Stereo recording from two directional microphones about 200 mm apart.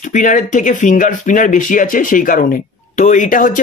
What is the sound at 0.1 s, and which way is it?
Speech, 40° left (ahead or behind).